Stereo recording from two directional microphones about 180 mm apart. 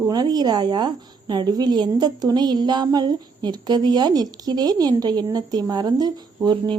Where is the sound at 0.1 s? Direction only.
20° right (ahead or behind).